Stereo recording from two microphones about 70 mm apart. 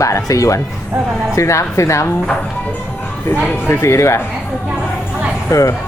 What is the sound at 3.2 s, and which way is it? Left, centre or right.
Speech, left.